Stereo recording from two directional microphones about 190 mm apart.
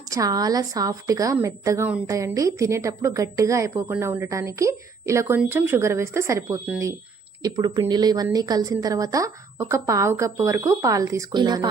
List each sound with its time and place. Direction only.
0.1 s a woman's voice: 20° right (ahead or behind)